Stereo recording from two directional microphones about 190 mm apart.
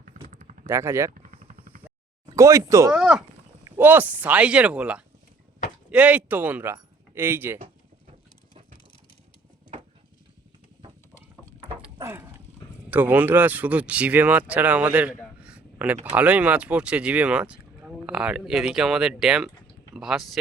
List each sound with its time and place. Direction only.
0.3 s a sound: 40° right (ahead or behind)
0.7 s speech: 15° right (ahead or behind)
1.3 s vehicle: 50° right (ahead or behind)
2.3 s speech: 15° right (ahead or behind)
3.0 s speech: 5° right (ahead or behind)
11.9 s dog: 15° right (ahead or behind)
12.9 s speech: 10° right (ahead or behind)
15.2 s a sound: 5° right (ahead or behind)
16.0 s speech: 5° right (ahead or behind)